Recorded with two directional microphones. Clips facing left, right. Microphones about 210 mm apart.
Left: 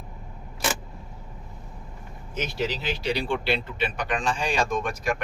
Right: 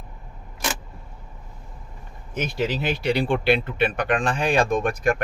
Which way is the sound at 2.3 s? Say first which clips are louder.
Right 3 dB; 55° right (ahead or behind).